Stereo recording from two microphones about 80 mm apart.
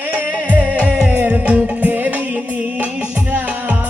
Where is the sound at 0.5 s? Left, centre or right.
Centre.